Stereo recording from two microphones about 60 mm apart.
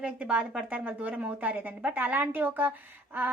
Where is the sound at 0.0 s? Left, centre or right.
Right.